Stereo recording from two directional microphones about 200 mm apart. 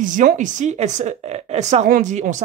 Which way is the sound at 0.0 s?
40° right (ahead or behind).